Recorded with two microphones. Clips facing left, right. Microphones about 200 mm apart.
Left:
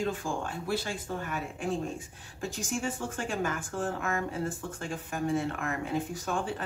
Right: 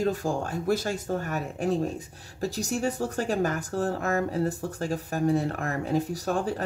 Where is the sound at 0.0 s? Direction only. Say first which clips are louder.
Right 5 dB; 40° right (ahead or behind).